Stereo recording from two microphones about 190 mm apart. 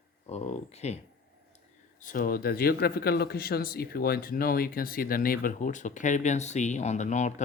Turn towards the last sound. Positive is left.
turn(degrees=40)  # may be behind; listen again after turning